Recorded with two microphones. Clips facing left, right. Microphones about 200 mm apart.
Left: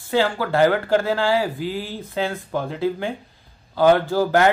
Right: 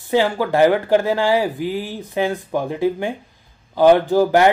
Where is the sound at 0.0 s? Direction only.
15° right (ahead or behind).